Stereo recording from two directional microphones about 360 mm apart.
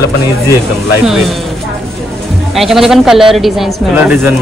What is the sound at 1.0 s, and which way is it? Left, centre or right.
Speech, centre.